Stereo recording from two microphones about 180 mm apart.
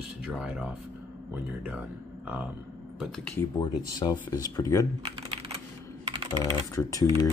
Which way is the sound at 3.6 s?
20° left (ahead or behind).